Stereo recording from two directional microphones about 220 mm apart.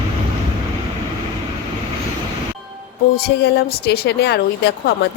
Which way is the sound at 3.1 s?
45° left (ahead or behind).